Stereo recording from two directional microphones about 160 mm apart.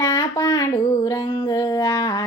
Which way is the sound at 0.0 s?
20° left (ahead or behind).